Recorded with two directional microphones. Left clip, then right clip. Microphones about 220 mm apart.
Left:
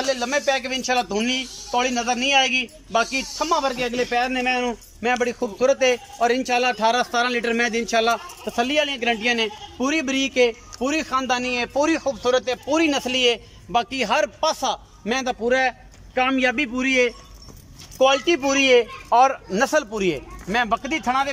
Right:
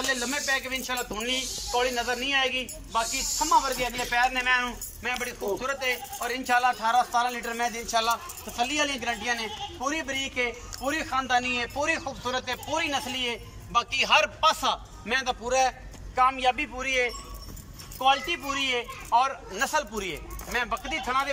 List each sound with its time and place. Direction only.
0.1 s speech: 55° left (ahead or behind)